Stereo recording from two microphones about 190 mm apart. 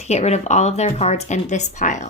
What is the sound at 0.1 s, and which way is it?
Speech, 35° left (ahead or behind).